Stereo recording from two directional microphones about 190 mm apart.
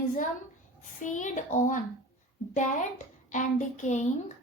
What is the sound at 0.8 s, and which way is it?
A child's voice, 40° left (ahead or behind).